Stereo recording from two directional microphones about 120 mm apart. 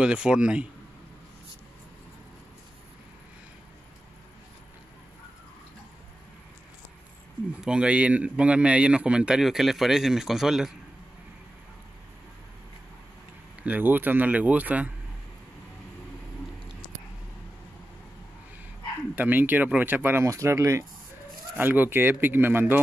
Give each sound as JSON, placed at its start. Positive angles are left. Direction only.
{"t": 0.0, "sound": "a man's voice", "side_deg": -10}
{"t": 7.6, "sound": "a man's voice", "side_deg": -10}
{"t": 13.6, "sound": "a man's voice", "side_deg": -15}
{"t": 19.1, "sound": "a man's voice", "side_deg": -15}